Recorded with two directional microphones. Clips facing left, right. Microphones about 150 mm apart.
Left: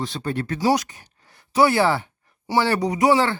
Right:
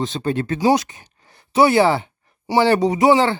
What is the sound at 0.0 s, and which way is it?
Speech, 20° right (ahead or behind).